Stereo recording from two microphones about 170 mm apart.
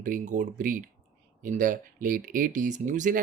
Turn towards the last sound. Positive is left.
turn(degrees=-50)  # may be behind; listen again after turning